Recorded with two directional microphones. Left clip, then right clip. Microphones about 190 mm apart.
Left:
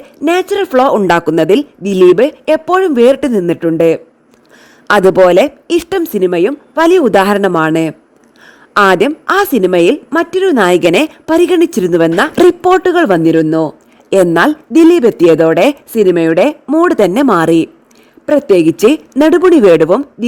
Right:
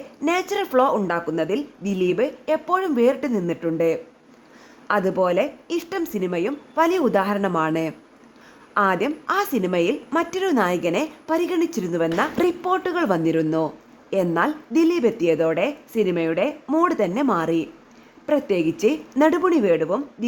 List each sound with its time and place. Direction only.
0.2 s speech: 40° left (ahead or behind)
10.1 s speech: 35° left (ahead or behind); by 16.6 s 55° left (ahead or behind)
16.6 s speech: 40° left (ahead or behind); by 20.2 s 60° left (ahead or behind)